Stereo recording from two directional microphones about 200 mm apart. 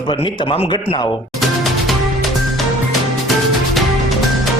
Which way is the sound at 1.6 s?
Centre (ahead or behind).